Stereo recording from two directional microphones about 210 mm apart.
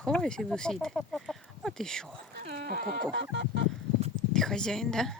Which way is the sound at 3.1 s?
55° right (ahead or behind).